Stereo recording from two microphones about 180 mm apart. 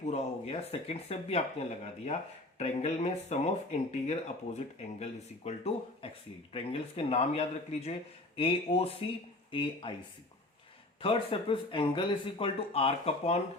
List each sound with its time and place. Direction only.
0.0 s speech: 35° left (ahead or behind)
11.0 s speech: 30° left (ahead or behind)